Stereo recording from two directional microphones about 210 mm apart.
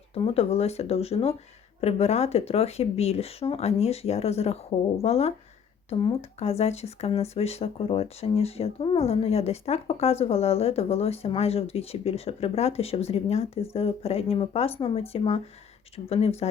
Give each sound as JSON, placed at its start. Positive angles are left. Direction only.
{"t": 0.1, "sound": "speech", "side_deg": 30}